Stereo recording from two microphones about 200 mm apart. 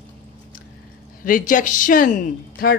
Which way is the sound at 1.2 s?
40° left (ahead or behind).